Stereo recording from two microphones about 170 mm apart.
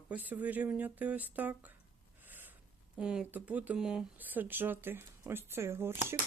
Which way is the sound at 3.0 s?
5° right (ahead or behind).